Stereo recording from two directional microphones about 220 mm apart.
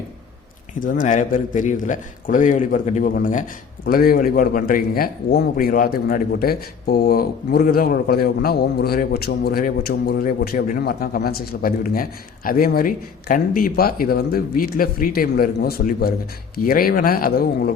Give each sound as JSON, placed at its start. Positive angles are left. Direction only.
{"t": 0.7, "sound": "a man's voice", "side_deg": 35}